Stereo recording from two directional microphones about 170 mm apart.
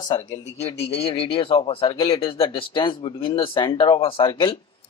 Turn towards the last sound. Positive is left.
turn(degrees=30)  # may be behind; listen again after turning